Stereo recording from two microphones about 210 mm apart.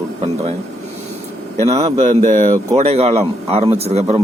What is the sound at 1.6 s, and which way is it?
Speech, 30° right (ahead or behind).